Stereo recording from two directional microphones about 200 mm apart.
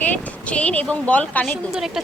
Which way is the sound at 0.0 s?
5° left (ahead or behind).